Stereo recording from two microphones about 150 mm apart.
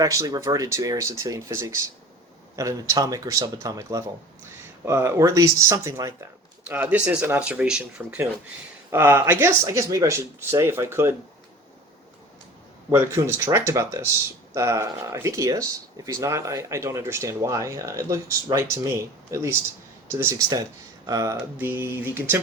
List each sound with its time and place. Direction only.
0.0 s speech: 20° right (ahead or behind); by 8.2 s 5° right (ahead or behind)
8.9 s speech: 15° right (ahead or behind)
12.9 s speech: 15° right (ahead or behind)